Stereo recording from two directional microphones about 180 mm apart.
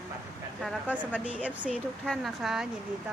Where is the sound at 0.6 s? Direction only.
Centre (ahead or behind).